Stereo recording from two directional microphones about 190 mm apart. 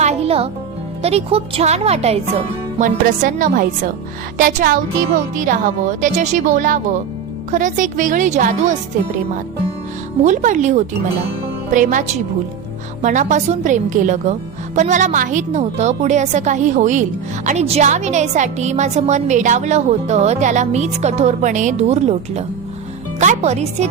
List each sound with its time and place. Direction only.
0.0 s music: 35° right (ahead or behind)
1.0 s a woman's voice: 30° right (ahead or behind)
10.2 s a woman's voice: 40° right (ahead or behind)